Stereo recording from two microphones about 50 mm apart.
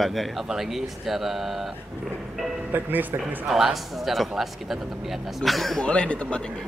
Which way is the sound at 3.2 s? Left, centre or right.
Centre.